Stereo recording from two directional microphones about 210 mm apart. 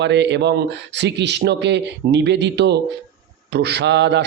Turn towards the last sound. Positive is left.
turn(degrees=-55)  # may be behind; listen again after turning